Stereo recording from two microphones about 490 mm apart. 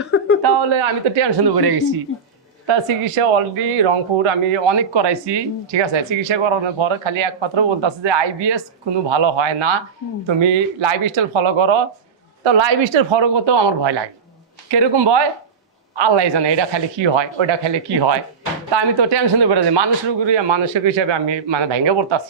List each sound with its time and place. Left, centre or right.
0.0 s a sound: left
0.4 s speech: right
2.6 s a woman's voice: right